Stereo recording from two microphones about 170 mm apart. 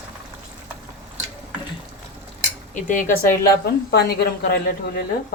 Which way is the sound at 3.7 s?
70° left (ahead or behind).